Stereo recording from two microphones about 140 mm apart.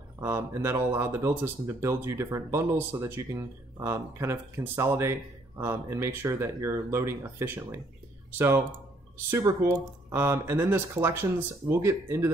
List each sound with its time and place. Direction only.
0.2 s speech: 20° right (ahead or behind)
10.0 s speech: 20° right (ahead or behind)